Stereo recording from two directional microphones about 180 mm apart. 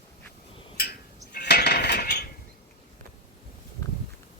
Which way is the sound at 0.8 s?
60° left (ahead or behind).